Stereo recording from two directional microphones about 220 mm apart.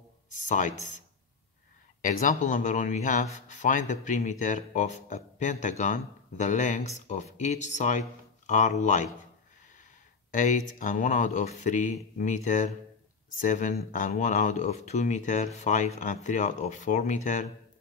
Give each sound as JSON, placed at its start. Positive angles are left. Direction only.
{"t": 0.3, "sound": "speech", "side_deg": 35}
{"t": 2.0, "sound": "speech", "side_deg": 35}
{"t": 10.3, "sound": "speech", "side_deg": 35}